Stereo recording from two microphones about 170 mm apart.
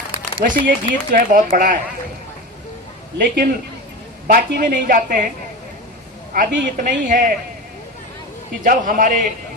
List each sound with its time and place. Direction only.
0.4 s speech: 50° right (ahead or behind)
3.2 s speech: 60° right (ahead or behind)
6.3 s speech: 55° right (ahead or behind)
8.6 s speech: 50° right (ahead or behind)